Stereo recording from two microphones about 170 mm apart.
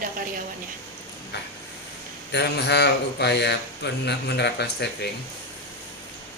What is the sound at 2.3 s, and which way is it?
A man's voice, 80° left.